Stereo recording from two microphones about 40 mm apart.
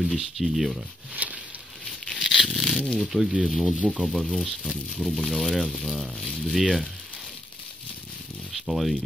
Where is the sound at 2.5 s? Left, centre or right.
Centre.